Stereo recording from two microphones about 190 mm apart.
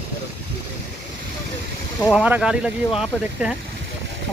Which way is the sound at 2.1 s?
5° right (ahead or behind).